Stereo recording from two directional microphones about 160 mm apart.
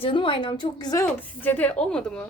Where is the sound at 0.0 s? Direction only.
30° left (ahead or behind).